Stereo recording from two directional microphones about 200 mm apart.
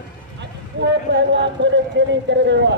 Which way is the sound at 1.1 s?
60° right (ahead or behind).